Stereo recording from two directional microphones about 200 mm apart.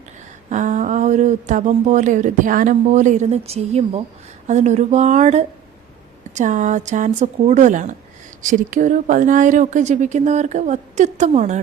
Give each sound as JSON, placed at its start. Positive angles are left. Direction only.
{"t": 0.5, "sound": "speech", "side_deg": -40}